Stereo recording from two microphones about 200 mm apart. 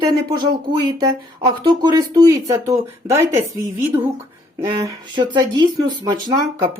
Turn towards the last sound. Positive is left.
turn(degrees=-20)  # may be behind; listen again after turning